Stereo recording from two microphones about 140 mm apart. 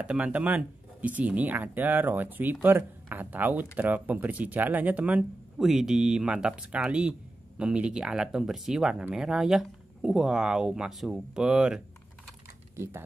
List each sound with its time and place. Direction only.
0.0 s speech: 10° right (ahead or behind)
12.7 s speech: 20° right (ahead or behind)